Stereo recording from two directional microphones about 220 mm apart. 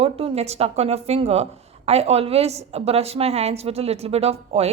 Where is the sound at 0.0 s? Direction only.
25° right (ahead or behind).